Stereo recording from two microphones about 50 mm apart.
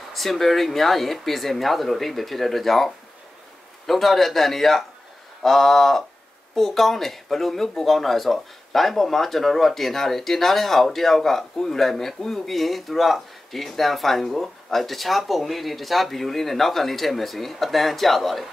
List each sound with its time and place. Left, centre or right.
0.1 s speech: centre